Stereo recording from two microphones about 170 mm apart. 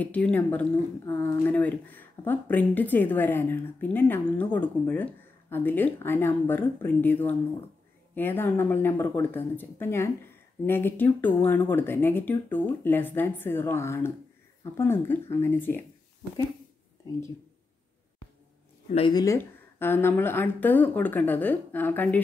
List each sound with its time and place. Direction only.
0.0 s speech: 10° left (ahead or behind)
18.9 s speech: 35° left (ahead or behind)
19.1 s speech: 15° left (ahead or behind)